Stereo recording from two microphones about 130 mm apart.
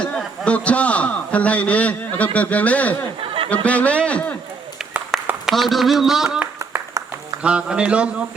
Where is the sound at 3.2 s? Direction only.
45° right (ahead or behind).